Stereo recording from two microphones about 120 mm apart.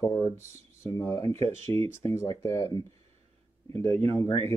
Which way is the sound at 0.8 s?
20° left (ahead or behind).